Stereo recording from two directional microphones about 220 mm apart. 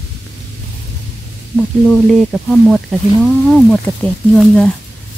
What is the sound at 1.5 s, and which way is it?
Speech, centre (ahead or behind).